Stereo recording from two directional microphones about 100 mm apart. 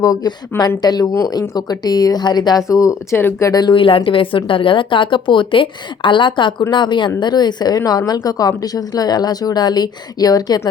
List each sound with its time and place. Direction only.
0.0 s a woman's voice: 40° left (ahead or behind)
3.2 s speech: 20° left (ahead or behind)
3.5 s a woman's voice: 45° left (ahead or behind)